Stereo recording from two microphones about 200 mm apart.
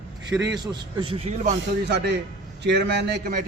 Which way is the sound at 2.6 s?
60° right (ahead or behind).